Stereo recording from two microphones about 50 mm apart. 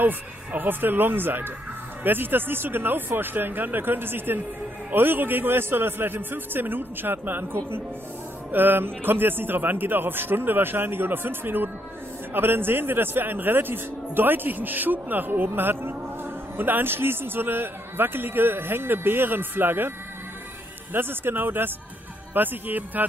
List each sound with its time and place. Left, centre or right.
0.0 s a man's voice: right
8.5 s a man's voice: right
20.9 s a man's voice: right